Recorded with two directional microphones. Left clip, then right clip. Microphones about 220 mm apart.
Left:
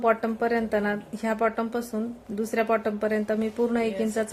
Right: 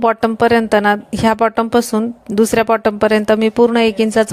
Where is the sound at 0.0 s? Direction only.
40° right (ahead or behind).